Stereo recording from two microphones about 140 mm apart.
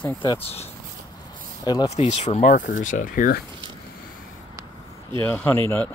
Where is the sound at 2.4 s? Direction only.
75° left (ahead or behind).